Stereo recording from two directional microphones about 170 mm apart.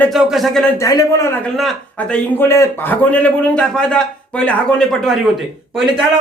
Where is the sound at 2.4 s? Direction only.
15° left (ahead or behind).